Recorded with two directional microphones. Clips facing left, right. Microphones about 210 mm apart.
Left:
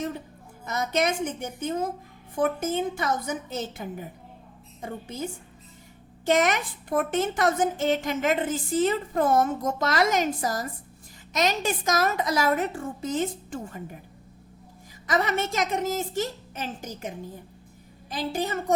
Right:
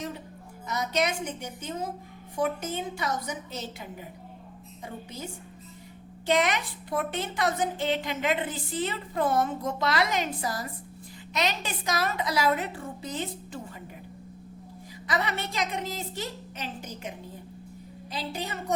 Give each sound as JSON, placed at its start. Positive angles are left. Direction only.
{"t": 0.7, "sound": "a woman's voice", "side_deg": 50}
{"t": 15.0, "sound": "a woman's voice", "side_deg": 45}
{"t": 18.1, "sound": "a woman's voice", "side_deg": 50}